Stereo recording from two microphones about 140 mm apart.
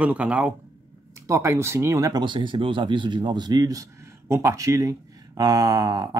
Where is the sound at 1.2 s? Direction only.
20° right (ahead or behind).